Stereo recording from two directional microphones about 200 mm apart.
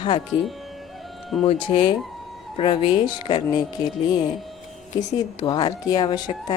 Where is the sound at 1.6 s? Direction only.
25° left (ahead or behind).